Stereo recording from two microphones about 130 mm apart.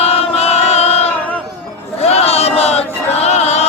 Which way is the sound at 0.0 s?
50° left (ahead or behind).